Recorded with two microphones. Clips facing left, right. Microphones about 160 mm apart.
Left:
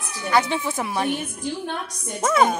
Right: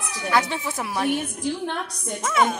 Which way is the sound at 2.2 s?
40° left (ahead or behind).